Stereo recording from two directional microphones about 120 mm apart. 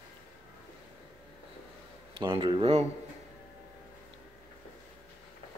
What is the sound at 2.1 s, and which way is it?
Speech, 45° right (ahead or behind).